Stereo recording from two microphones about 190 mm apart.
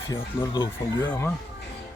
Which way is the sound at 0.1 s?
15° left (ahead or behind).